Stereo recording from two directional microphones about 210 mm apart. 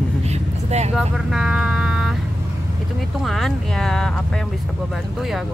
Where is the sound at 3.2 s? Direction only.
Centre (ahead or behind).